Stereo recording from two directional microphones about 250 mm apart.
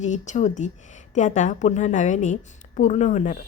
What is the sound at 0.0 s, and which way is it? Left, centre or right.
A woman's voice, left.